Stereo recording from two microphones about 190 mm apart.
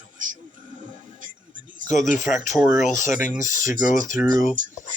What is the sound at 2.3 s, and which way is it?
Speech, centre (ahead or behind).